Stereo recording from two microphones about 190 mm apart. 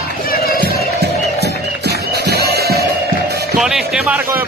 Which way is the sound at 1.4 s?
60° right (ahead or behind).